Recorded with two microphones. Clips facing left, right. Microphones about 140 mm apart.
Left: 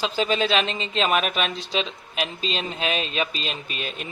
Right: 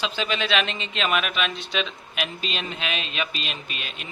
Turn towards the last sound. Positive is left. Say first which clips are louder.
# left 5 dB
turn(degrees=35)  # may be behind; listen again after turning